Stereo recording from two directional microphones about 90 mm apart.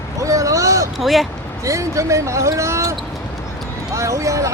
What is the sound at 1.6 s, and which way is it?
Speech, 35° right (ahead or behind).